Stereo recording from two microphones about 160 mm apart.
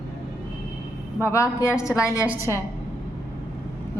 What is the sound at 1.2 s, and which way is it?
Speech, 20° left (ahead or behind).